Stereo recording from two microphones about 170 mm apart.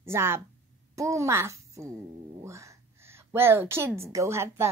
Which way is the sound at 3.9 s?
15° right (ahead or behind).